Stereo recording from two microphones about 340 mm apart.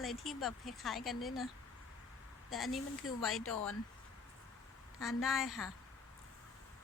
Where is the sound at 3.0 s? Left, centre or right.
Left.